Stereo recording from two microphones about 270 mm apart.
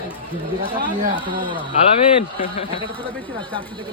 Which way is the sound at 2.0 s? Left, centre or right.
Centre.